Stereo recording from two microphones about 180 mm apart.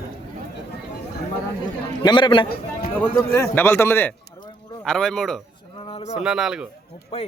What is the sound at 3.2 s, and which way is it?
A man's voice, 15° left (ahead or behind).